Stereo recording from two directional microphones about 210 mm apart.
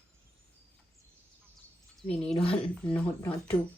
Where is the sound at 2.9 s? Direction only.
10° left (ahead or behind).